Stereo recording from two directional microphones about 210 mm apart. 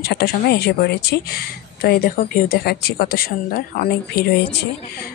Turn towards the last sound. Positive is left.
turn(degrees=50)  # may be behind; listen again after turning